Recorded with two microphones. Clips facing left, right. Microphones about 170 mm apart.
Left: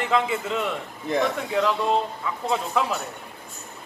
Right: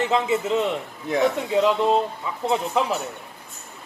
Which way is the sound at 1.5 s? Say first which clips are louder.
Right 4 dB; 20° right (ahead or behind).